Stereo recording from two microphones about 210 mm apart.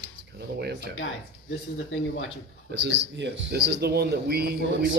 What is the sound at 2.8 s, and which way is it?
Speech, 55° right (ahead or behind).